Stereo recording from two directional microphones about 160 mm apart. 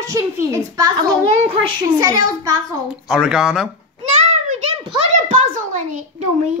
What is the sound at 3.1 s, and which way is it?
Speech, 5° right (ahead or behind).